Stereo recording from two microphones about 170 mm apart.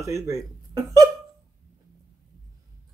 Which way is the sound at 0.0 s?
20° right (ahead or behind).